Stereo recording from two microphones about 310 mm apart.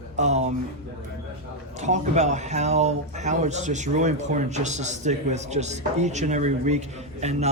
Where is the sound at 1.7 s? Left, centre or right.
Right.